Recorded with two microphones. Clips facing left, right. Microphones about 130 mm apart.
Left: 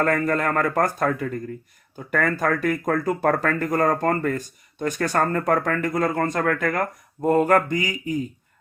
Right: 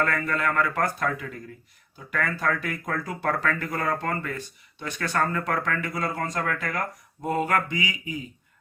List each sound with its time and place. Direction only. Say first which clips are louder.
0.0 s speech: left 5 dB; 40° left (ahead or behind)